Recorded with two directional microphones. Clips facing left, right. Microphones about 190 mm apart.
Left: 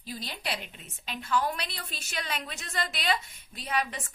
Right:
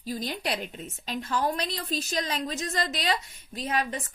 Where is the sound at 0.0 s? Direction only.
45° right (ahead or behind).